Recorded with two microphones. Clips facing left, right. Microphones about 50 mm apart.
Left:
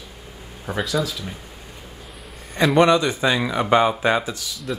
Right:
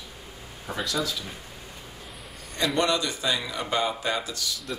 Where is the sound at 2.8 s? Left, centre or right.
Left.